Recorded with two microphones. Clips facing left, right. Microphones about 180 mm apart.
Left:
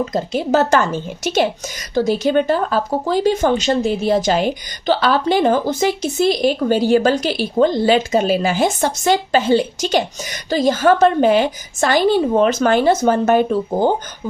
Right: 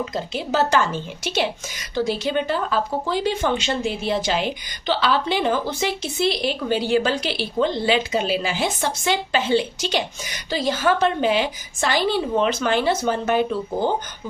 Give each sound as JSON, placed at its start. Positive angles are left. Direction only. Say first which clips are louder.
{"t": 0.0, "sound": "speech", "louder": "left 7 dB", "side_deg": 45}